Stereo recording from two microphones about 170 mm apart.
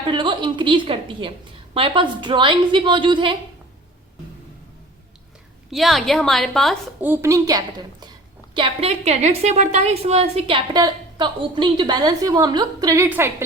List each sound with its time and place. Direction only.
0.0 s a woman's voice: 30° right (ahead or behind)
5.7 s a woman's voice: centre (ahead or behind)
7.0 s a woman's voice: 15° right (ahead or behind)
8.5 s a woman's voice: 35° right (ahead or behind); by 13.3 s 15° right (ahead or behind)